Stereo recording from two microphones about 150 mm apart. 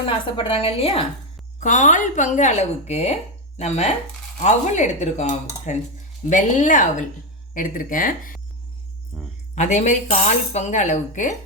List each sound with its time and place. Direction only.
0.3 s a woman's voice: 35° left (ahead or behind)
1.5 s speech: 55° left (ahead or behind)
9.1 s a sound: centre (ahead or behind)
9.6 s speech: 50° left (ahead or behind)